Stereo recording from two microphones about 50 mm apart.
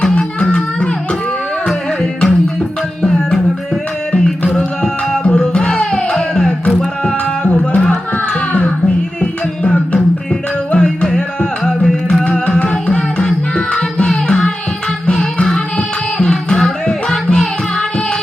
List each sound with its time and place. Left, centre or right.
0.1 s a sound: centre
1.6 s music: centre
4.5 s music: centre
7.0 s music: left
9.2 s music: left